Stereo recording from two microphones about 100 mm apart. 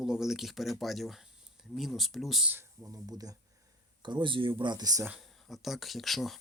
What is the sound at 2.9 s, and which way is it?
Speech, 35° right (ahead or behind).